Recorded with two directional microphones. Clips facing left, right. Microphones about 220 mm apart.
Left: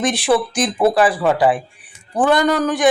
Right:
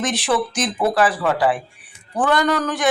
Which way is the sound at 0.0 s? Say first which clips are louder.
Left 4 dB; 15° left (ahead or behind).